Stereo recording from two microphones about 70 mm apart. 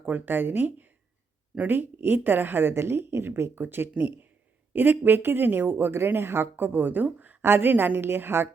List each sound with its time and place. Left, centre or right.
0.0 s a woman's voice: right